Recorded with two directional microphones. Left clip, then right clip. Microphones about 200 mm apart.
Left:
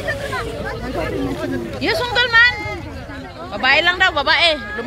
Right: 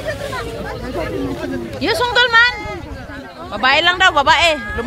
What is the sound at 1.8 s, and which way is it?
Speech, 40° right (ahead or behind).